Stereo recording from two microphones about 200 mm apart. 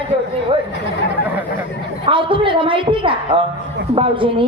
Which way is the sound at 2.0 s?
25° right (ahead or behind).